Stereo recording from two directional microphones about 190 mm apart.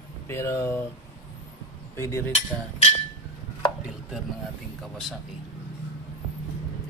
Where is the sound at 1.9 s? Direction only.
15° left (ahead or behind).